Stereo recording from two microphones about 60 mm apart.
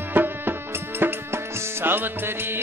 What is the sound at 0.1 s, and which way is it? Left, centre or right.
Music, right.